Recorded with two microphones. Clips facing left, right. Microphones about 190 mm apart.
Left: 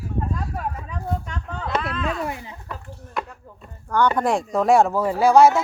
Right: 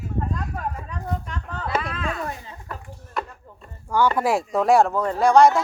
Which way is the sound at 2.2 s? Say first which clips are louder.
Left 3 dB; 15° left (ahead or behind).